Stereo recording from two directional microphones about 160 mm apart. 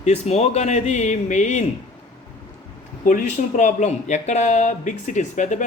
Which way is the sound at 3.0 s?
50° left (ahead or behind).